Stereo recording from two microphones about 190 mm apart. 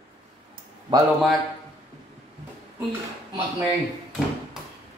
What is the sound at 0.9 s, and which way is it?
Speech, 25° right (ahead or behind).